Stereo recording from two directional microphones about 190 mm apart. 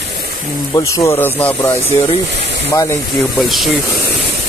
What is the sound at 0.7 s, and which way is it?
Speech, 15° left (ahead or behind).